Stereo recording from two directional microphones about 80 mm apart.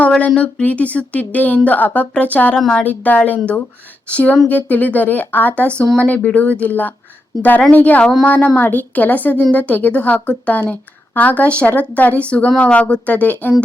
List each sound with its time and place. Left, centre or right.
0.0 s a woman's voice: centre
8.0 s speech: centre
8.3 s a woman's voice: centre